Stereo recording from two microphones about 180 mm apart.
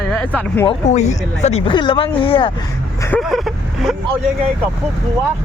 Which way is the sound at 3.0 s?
10° left (ahead or behind).